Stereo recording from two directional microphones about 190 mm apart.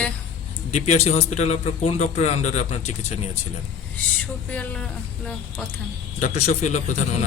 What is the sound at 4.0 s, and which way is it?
A woman's voice, 10° left (ahead or behind).